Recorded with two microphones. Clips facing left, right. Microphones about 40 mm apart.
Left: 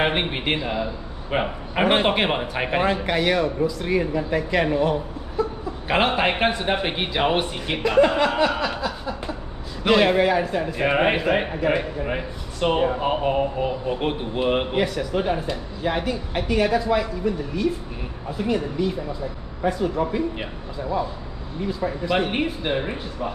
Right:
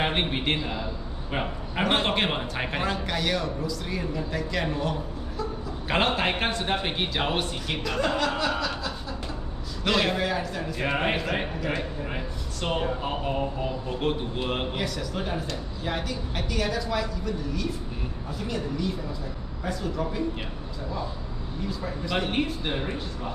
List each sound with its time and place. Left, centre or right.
0.0 s a man's voice: centre
5.9 s a man's voice: centre
21.6 s a man's voice: left